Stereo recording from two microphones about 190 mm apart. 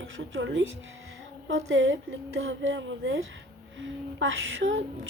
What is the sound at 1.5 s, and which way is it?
Speech, 70° right (ahead or behind).